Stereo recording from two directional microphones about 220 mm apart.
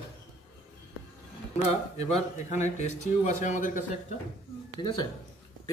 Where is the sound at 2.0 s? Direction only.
30° left (ahead or behind).